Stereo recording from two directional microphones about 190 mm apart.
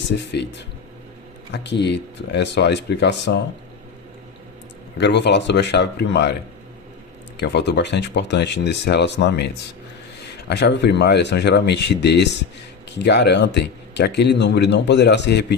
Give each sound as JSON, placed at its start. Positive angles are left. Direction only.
{"t": 0.3, "sound": "speech", "side_deg": 65}
{"t": 4.9, "sound": "speech", "side_deg": 65}
{"t": 7.3, "sound": "speech", "side_deg": 65}